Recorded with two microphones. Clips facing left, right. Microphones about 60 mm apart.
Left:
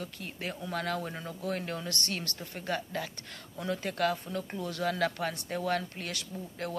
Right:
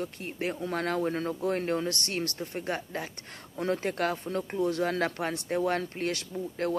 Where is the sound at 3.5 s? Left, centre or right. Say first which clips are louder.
Right 5 dB; right.